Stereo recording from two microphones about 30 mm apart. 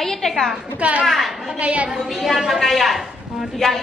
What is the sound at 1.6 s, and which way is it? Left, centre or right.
Speech, right.